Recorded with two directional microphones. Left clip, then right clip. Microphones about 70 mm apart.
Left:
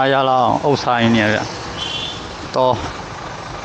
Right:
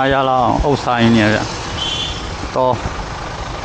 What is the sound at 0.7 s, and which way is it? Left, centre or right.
Speech, left.